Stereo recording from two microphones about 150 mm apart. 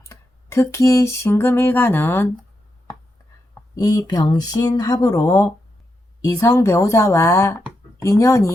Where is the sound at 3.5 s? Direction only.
25° left (ahead or behind).